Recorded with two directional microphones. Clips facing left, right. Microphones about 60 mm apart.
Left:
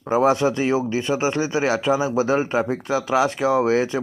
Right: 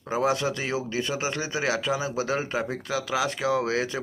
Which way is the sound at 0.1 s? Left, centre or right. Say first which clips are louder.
Left 7 dB; left.